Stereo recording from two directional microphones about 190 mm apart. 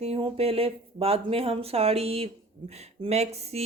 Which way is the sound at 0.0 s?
30° right (ahead or behind).